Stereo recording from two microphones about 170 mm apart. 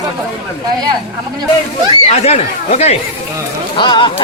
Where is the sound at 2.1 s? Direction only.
40° left (ahead or behind).